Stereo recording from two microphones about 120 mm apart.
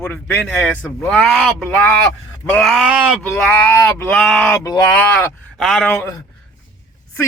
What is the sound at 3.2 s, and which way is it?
A man's voice, 10° left (ahead or behind).